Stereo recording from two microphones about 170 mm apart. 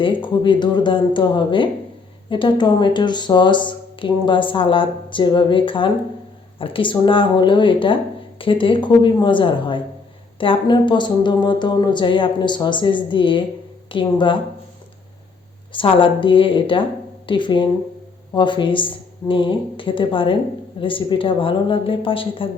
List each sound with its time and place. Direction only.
0.0 s speech: 30° left (ahead or behind)
15.7 s a woman's voice: 30° left (ahead or behind)